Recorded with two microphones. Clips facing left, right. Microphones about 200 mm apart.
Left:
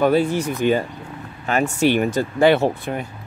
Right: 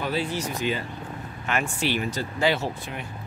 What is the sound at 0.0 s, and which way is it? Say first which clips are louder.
Speech: left 10 dB; 50° left (ahead or behind).